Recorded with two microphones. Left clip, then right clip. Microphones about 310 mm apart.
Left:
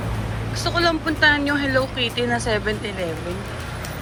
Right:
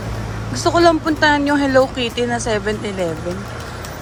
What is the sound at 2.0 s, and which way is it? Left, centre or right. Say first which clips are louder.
A woman's voice: right 2 dB; centre.